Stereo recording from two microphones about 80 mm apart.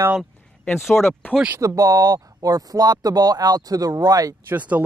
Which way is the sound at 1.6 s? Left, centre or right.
Right.